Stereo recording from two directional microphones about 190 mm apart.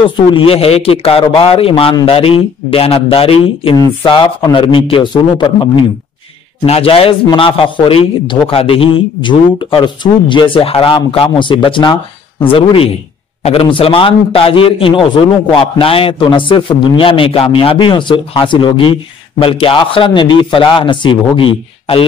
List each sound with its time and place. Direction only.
0.3 s a man's voice: 30° left (ahead or behind)